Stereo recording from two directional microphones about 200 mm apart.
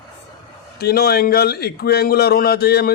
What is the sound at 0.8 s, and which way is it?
A man's voice, 50° left (ahead or behind).